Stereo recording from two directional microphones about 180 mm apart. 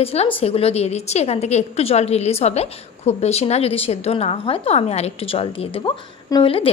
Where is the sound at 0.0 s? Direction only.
35° left (ahead or behind).